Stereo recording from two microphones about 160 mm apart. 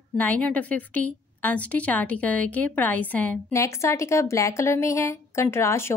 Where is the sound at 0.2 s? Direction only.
10° left (ahead or behind).